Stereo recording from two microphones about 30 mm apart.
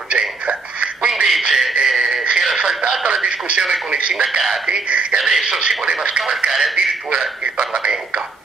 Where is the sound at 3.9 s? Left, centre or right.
Right.